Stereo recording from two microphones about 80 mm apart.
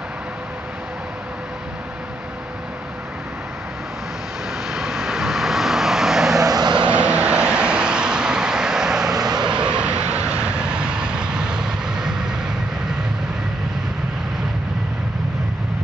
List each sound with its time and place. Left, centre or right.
4.6 s vehicle: centre
6.4 s vehicle: right
6.7 s vehicle: centre